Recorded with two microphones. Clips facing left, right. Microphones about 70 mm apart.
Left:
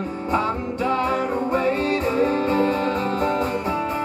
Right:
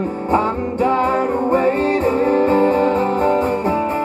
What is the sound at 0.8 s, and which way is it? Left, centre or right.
Music, right.